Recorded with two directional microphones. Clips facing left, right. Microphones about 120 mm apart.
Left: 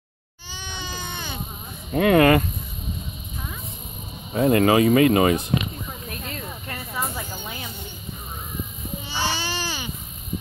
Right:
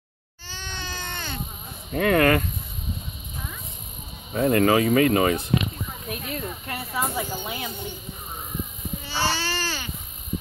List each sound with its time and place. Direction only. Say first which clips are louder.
0.5 s baby cry: left 1 dB; 15° left (ahead or behind)
1.9 s speech: left 3 dB; 20° left (ahead or behind)
4.3 s speech: left 2 dB; 20° left (ahead or behind)
6.0 s snake: right 6 dB; 10° right (ahead or behind)
9.1 s baby cry: right 1 dB; 15° left (ahead or behind)